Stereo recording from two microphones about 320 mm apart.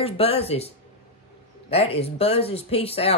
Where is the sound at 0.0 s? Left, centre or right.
Centre.